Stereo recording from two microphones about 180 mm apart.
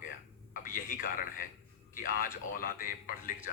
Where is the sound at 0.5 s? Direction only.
50° left (ahead or behind).